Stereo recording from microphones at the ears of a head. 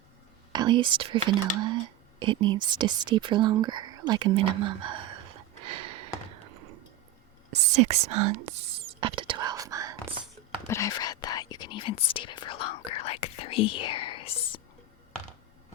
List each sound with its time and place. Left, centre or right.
0.5 s speech: right
7.5 s whispering: right
10.7 s whispering: left